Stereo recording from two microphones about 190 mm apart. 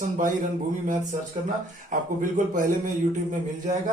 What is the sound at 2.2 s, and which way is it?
Speech, 45° right (ahead or behind).